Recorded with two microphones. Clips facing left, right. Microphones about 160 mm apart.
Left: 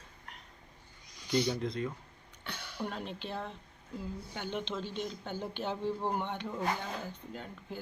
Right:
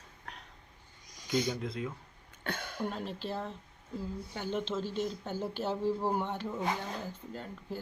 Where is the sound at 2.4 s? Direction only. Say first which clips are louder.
Right 4 dB; 50° right (ahead or behind).